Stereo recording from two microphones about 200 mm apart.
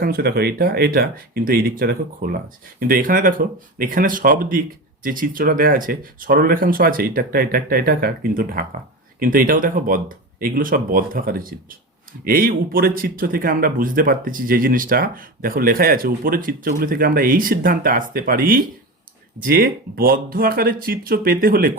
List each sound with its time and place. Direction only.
0.0 s speech: 50° right (ahead or behind)